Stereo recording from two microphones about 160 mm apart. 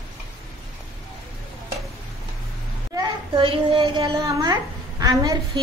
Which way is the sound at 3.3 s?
35° right (ahead or behind).